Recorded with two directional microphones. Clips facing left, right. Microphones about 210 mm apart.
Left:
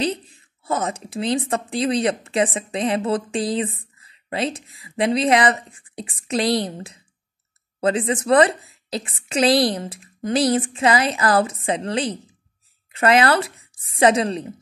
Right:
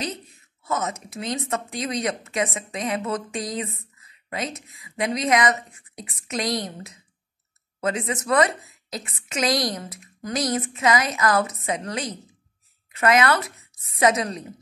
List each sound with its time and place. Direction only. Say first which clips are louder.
0.0 s speech: left 7 dB; 30° left (ahead or behind)